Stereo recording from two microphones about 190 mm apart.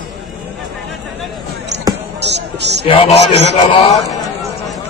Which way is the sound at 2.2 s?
65° right (ahead or behind).